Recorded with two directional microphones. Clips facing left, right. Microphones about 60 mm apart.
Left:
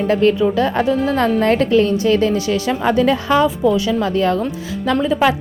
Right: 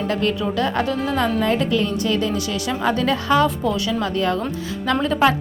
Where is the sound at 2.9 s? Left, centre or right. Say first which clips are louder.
Left 4 dB; left.